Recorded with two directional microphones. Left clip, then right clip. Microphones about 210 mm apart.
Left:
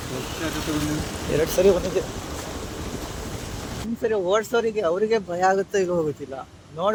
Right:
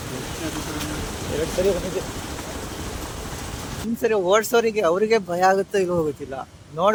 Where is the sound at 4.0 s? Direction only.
20° right (ahead or behind).